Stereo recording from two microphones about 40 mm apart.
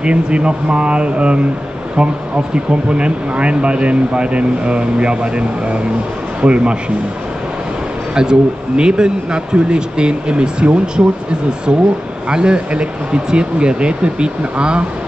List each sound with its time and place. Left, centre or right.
0.0 s speech: right
8.1 s speech: centre
12.3 s speech: right